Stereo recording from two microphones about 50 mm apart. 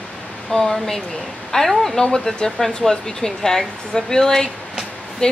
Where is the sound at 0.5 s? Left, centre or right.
Centre.